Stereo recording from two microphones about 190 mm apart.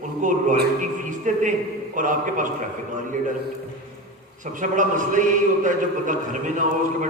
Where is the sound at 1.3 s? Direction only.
40° right (ahead or behind).